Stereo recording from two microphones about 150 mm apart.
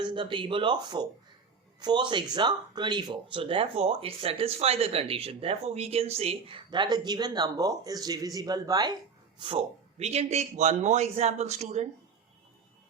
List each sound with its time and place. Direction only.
0.0 s speech: 30° right (ahead or behind)
10.0 s a man's voice: 45° right (ahead or behind)